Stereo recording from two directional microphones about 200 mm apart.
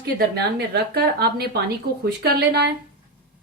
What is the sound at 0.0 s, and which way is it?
Speech, 55° right (ahead or behind).